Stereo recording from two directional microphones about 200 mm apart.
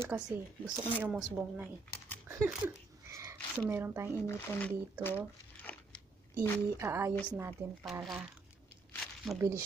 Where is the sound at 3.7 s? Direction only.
10° right (ahead or behind).